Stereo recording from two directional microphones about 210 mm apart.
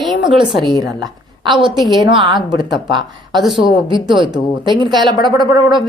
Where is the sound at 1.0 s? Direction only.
20° right (ahead or behind).